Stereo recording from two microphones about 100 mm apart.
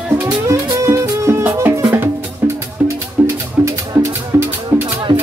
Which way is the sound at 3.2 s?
15° right (ahead or behind).